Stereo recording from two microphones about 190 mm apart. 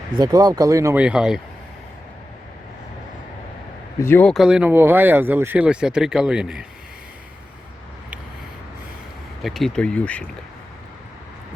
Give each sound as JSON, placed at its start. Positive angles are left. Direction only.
{"t": 0.2, "sound": "speech", "side_deg": -20}
{"t": 4.0, "sound": "speech", "side_deg": 10}
{"t": 9.4, "sound": "speech", "side_deg": 0}